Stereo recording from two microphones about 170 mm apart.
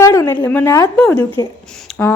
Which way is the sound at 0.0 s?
15° left (ahead or behind).